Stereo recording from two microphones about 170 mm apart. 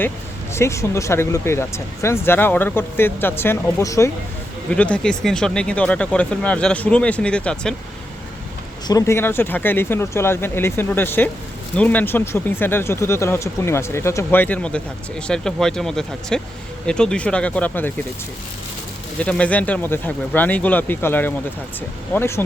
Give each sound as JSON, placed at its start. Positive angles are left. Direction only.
{"t": 0.5, "sound": "speech", "side_deg": 15}
{"t": 8.9, "sound": "speech", "side_deg": 20}
{"t": 19.2, "sound": "speech", "side_deg": 5}